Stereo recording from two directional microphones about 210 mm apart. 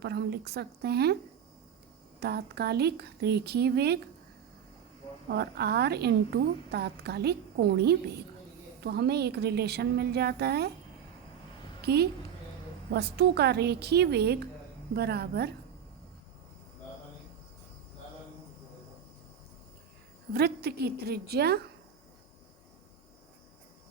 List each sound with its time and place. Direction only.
0.0 s a woman's voice: 50° right (ahead or behind)
2.2 s a woman's voice: 50° right (ahead or behind)
5.3 s a woman's voice: 50° right (ahead or behind)
11.8 s a woman's voice: 50° right (ahead or behind)
20.3 s a woman's voice: 50° right (ahead or behind)